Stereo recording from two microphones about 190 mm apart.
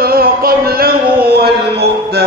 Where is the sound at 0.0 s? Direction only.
50° right (ahead or behind).